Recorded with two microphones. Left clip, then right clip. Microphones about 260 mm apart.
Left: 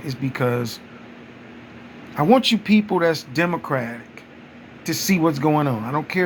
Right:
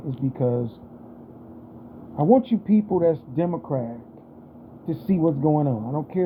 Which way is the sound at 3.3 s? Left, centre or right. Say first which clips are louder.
Left 4 dB; left.